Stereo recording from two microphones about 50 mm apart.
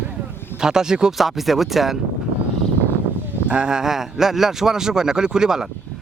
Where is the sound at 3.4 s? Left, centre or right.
Centre.